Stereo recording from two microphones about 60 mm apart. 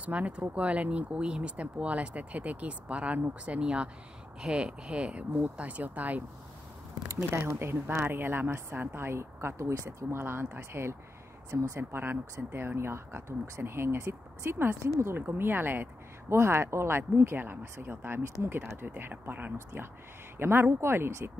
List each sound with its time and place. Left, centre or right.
0.0 s speech: right
7.2 s speech: right
14.8 s speech: right
15.1 s speech: right